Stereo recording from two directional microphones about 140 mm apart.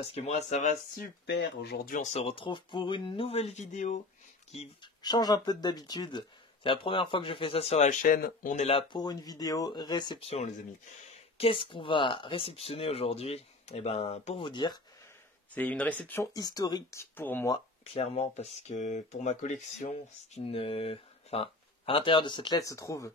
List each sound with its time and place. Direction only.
0.0 s speech: 50° left (ahead or behind)
5.0 s speech: 30° left (ahead or behind); by 8.6 s 75° left (ahead or behind)
8.6 s speech: 40° left (ahead or behind)
14.4 s speech: 30° left (ahead or behind)
15.5 s speech: 10° left (ahead or behind)
16.3 s speech: 25° left (ahead or behind)
17.9 s speech: 45° left (ahead or behind)
22.6 s speech: 25° left (ahead or behind)